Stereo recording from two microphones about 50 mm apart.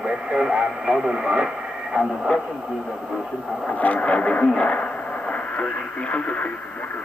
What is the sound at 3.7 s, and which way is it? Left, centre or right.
Speech, left.